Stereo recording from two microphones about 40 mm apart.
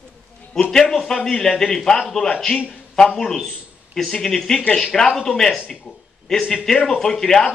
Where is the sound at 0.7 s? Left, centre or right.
Centre.